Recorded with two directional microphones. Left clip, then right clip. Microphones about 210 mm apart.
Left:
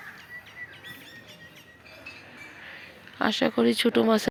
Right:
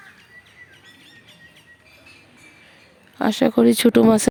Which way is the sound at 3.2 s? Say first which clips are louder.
Right 6 dB; 35° right (ahead or behind).